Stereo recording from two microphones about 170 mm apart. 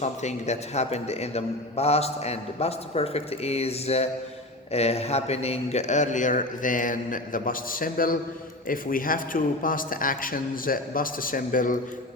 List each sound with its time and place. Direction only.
0.0 s a man's voice: 40° left (ahead or behind)